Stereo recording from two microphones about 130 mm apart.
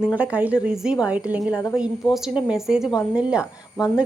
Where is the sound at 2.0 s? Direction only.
35° left (ahead or behind).